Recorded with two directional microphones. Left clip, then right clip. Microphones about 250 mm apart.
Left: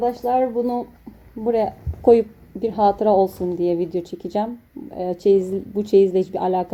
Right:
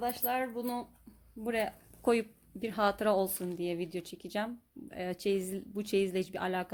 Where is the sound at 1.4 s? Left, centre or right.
Right.